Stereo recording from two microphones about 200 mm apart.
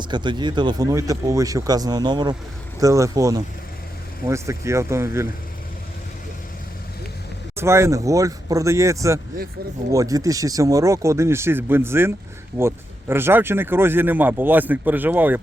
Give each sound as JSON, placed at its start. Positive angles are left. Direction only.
{"t": 0.0, "sound": "speech", "side_deg": -20}
{"t": 7.5, "sound": "speech", "side_deg": -15}